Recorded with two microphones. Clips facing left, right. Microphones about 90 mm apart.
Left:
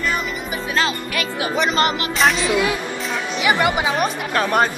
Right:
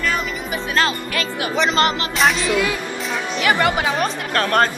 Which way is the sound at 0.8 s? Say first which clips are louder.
Right 1 dB; 20° left (ahead or behind).